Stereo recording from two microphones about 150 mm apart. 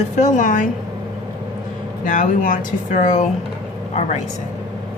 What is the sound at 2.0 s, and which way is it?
A man's voice, 60° left (ahead or behind).